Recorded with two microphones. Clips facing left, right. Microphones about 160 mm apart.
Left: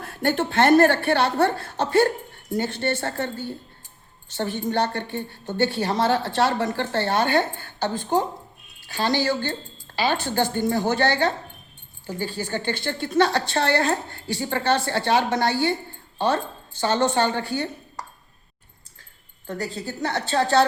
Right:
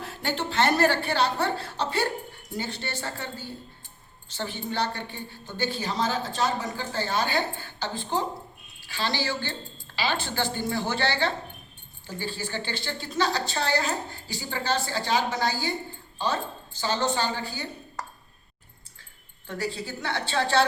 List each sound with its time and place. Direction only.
0.0 s a woman's voice: 55° left (ahead or behind)
19.5 s a woman's voice: 45° left (ahead or behind)